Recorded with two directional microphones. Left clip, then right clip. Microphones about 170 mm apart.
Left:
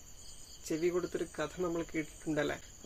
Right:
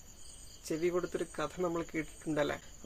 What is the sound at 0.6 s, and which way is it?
Speech, 15° right (ahead or behind).